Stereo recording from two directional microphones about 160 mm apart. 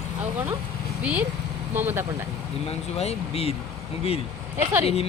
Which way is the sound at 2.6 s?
40° left (ahead or behind).